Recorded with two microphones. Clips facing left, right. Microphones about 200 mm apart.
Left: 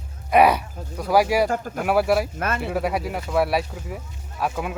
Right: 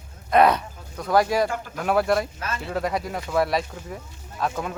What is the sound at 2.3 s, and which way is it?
Speech, 60° left (ahead or behind).